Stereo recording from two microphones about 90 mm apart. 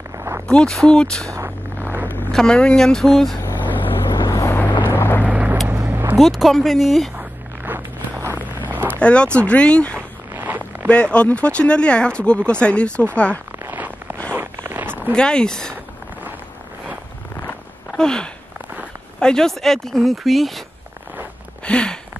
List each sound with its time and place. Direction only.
0.5 s speech: 5° left (ahead or behind)
2.3 s speech: 10° left (ahead or behind)
3.4 s vehicle: 20° left (ahead or behind)
4.9 s boat: 25° left (ahead or behind)
5.2 s vehicle: 15° right (ahead or behind)
6.1 s speech: centre (ahead or behind)
7.2 s walk: 20° right (ahead or behind)
9.0 s speech: 10° left (ahead or behind)
9.9 s zipper: 20° right (ahead or behind)
10.9 s speech: 10° left (ahead or behind)
13.7 s zipper: 20° right (ahead or behind)
15.1 s speech: 10° left (ahead or behind)
17.9 s speech: 10° left (ahead or behind)
21.6 s a sound: 10° left (ahead or behind)